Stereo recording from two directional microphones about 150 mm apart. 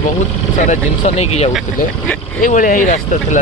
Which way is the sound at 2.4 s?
60° left (ahead or behind).